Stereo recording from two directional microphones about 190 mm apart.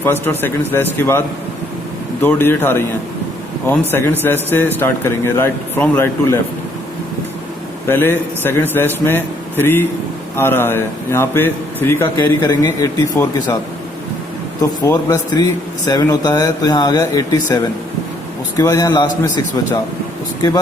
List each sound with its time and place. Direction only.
0.0 s speech: 10° left (ahead or behind)
2.2 s speech: 10° left (ahead or behind)
7.9 s speech: 10° left (ahead or behind)
14.6 s speech: 15° left (ahead or behind)